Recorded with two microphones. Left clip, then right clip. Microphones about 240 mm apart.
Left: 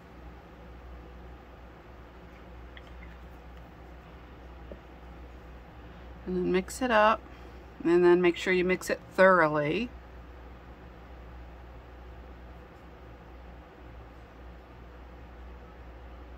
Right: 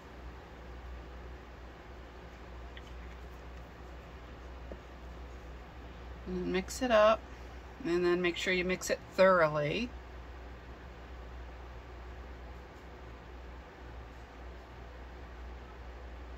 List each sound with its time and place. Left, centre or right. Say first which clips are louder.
6.4 s speech: left 5 dB; left